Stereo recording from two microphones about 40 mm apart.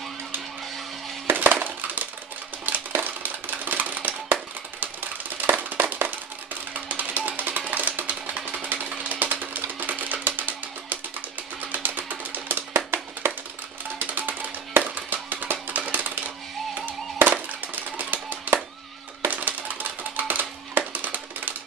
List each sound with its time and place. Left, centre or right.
1.3 s a sound: right
6.9 s music: right
12.7 s music: right
13.9 s music: right